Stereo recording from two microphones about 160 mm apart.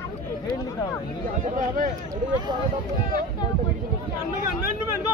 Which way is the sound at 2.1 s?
25° right (ahead or behind).